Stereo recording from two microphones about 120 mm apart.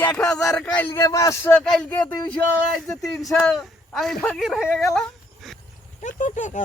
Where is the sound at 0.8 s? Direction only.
25° left (ahead or behind).